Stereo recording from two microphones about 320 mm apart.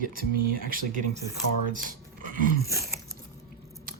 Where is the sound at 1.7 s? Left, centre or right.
Right.